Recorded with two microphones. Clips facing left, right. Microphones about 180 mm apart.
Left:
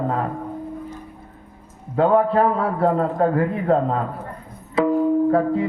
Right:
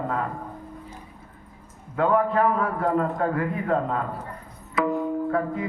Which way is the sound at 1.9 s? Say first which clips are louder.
Left 5 dB; 30° left (ahead or behind).